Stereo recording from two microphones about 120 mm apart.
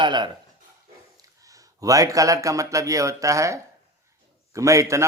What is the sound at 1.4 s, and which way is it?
Speech, 30° right (ahead or behind).